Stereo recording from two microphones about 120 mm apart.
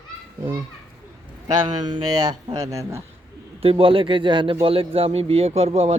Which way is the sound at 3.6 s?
50° right (ahead or behind).